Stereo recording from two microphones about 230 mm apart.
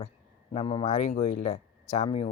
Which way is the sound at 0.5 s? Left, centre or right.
Left.